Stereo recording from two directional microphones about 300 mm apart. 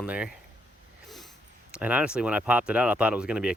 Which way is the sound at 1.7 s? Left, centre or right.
Centre.